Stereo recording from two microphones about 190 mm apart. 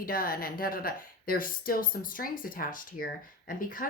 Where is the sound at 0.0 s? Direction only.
50° left (ahead or behind).